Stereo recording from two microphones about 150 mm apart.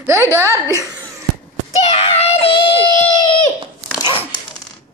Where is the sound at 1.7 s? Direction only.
40° left (ahead or behind).